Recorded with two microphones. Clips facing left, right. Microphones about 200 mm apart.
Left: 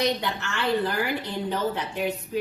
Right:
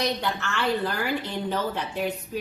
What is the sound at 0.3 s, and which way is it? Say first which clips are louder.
A woman's voice: left 1 dB; 15° left (ahead or behind).